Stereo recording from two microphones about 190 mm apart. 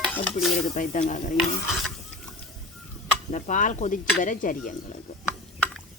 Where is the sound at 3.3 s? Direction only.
45° left (ahead or behind).